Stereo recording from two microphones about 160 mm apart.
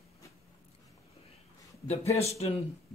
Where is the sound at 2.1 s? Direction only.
40° left (ahead or behind).